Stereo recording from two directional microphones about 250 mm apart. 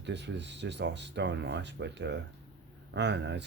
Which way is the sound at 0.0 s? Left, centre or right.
Right.